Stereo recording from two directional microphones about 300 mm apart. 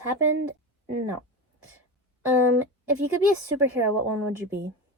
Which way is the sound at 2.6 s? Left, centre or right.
Right.